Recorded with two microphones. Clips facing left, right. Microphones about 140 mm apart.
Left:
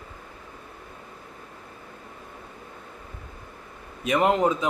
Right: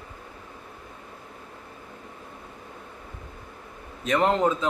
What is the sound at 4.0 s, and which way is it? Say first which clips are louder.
Speech: left 1 dB; 10° left (ahead or behind).